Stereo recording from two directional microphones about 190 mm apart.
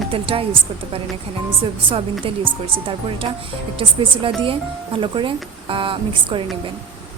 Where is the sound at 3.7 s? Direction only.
25° right (ahead or behind).